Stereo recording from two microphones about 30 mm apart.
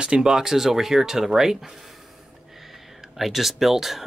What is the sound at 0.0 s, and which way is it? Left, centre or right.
Speech, right.